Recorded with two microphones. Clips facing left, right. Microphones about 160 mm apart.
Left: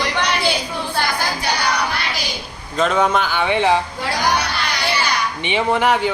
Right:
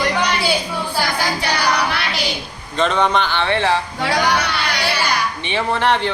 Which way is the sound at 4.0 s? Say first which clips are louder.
Right 2 dB; 70° right (ahead or behind).